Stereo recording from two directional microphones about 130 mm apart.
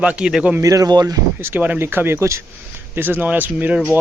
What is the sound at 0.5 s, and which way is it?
Speech, 25° right (ahead or behind).